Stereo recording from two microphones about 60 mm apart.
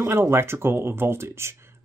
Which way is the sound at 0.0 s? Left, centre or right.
Right.